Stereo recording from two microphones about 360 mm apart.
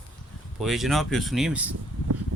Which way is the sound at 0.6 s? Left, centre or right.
Centre.